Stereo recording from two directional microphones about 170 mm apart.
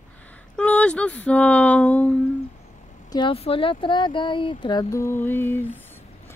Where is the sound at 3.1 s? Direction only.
30° left (ahead or behind); by 5.7 s 10° left (ahead or behind).